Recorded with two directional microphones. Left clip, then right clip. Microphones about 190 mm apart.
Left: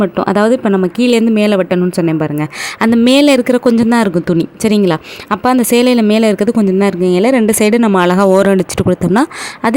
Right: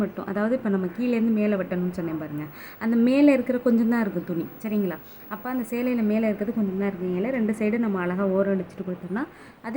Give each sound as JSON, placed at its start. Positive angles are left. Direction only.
{"t": 0.0, "sound": "speech", "side_deg": 55}